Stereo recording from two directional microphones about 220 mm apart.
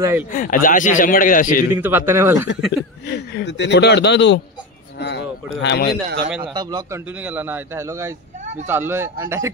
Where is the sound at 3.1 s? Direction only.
50° left (ahead or behind).